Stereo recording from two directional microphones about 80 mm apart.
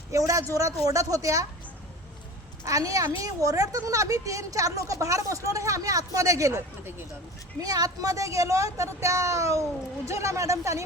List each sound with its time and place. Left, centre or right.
0.1 s a woman's voice: right
2.6 s a woman's voice: right
7.6 s a woman's voice: right